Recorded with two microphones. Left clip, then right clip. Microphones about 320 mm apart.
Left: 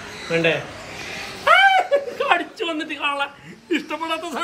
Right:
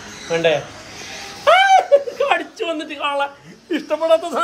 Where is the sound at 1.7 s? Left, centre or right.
Centre.